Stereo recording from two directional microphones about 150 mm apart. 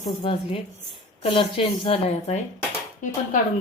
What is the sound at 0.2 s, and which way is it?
Speech, 35° left (ahead or behind).